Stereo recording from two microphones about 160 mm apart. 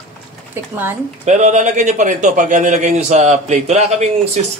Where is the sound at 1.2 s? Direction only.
50° right (ahead or behind).